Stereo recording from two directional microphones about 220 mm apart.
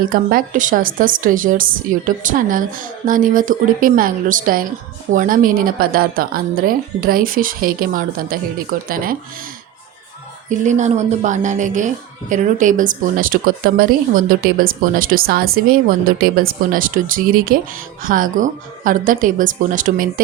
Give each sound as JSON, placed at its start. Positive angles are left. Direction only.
{"t": 0.1, "sound": "speech", "side_deg": -40}
{"t": 10.5, "sound": "speech", "side_deg": -35}